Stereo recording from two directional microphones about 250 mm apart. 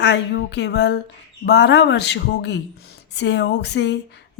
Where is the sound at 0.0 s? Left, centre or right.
Left.